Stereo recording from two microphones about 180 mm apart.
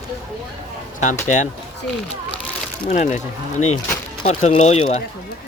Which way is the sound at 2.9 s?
45° left (ahead or behind).